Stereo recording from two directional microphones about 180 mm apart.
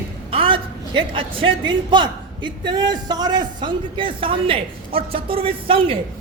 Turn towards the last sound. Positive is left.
turn(degrees=-30)  # may be behind; listen again after turning